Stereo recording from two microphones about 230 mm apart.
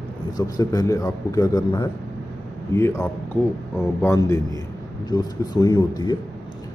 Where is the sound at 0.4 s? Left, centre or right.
Centre.